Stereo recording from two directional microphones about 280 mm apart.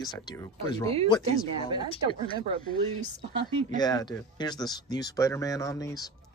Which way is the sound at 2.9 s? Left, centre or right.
Right.